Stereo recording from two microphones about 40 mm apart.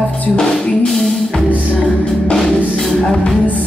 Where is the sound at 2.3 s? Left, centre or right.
Centre.